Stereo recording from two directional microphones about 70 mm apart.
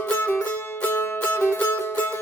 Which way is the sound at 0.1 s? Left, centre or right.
Left.